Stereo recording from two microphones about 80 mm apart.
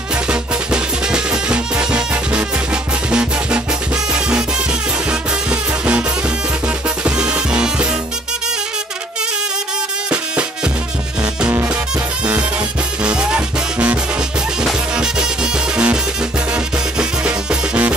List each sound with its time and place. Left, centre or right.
0.3 s music: centre
5.5 s music: centre
7.1 s music: centre
13.0 s music: centre